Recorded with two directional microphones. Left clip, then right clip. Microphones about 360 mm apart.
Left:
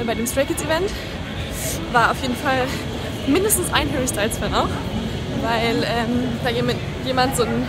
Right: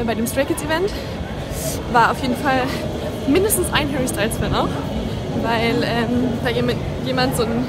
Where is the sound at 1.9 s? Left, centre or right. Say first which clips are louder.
Right 2 dB; centre.